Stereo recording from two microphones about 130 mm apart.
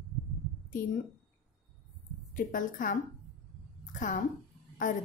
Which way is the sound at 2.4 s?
90° left.